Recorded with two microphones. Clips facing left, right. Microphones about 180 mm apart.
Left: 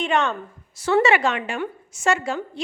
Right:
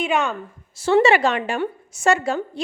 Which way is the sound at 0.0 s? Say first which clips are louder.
Even; 10° right (ahead or behind).